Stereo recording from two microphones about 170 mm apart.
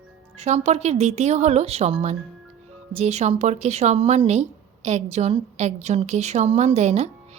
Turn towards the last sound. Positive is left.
turn(degrees=-40)  # may be behind; listen again after turning